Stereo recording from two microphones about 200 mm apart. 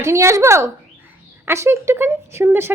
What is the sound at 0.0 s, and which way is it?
Speech, 15° right (ahead or behind).